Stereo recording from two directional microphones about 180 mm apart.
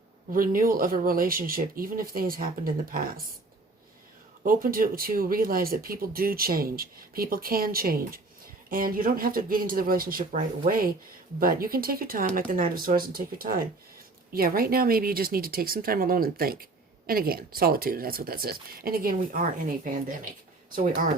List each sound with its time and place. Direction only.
0.3 s speech: 50° right (ahead or behind)
4.4 s speech: 55° right (ahead or behind)